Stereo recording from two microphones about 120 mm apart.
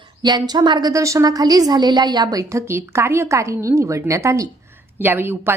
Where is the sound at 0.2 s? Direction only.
35° right (ahead or behind).